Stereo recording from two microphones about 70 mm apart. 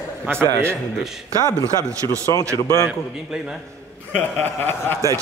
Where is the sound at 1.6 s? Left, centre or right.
Right.